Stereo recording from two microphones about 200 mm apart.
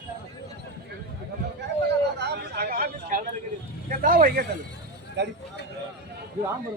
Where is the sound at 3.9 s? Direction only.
45° right (ahead or behind).